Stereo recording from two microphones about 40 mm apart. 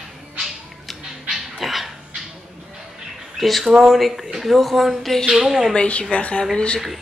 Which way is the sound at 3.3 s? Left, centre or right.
Centre.